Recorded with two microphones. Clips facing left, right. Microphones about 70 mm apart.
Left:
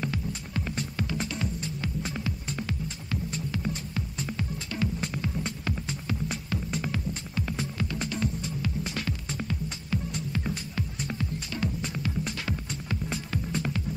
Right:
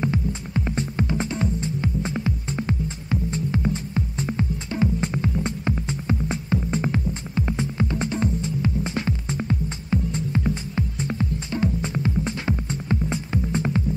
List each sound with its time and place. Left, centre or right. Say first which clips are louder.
0.0 s music: right 7 dB; right